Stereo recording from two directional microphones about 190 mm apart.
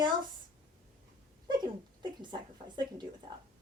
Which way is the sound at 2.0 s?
20° right (ahead or behind).